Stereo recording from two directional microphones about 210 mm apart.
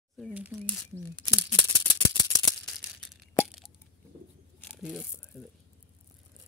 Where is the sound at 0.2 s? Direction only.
5° right (ahead or behind).